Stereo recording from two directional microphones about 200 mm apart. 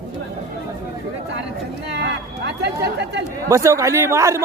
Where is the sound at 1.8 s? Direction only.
60° right (ahead or behind).